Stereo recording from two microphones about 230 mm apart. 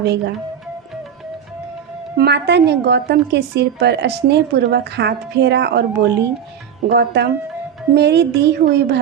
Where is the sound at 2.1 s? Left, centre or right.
Right.